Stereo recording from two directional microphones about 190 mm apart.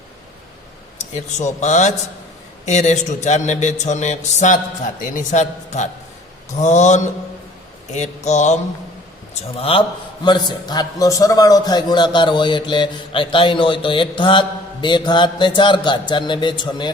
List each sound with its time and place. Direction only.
0.9 s a man's voice: 40° left (ahead or behind)